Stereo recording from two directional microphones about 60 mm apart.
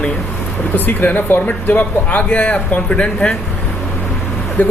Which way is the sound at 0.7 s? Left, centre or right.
Left.